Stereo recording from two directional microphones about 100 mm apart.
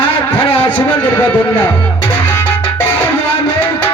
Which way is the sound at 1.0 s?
20° left (ahead or behind).